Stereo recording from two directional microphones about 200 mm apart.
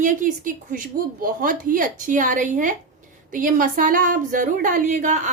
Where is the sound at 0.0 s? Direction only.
40° right (ahead or behind).